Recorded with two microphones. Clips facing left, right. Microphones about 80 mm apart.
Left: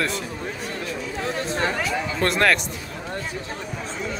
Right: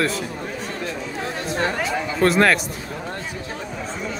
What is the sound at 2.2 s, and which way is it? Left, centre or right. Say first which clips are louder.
Speech: right 4 dB; centre.